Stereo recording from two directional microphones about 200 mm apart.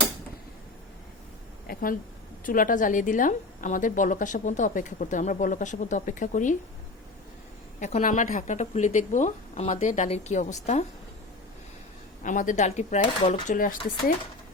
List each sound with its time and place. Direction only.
1.6 s a sound: 45° left (ahead or behind)
2.4 s a woman's voice: 45° left (ahead or behind)
7.8 s a woman's voice: 35° left (ahead or behind)
12.2 s a woman's voice: 40° left (ahead or behind)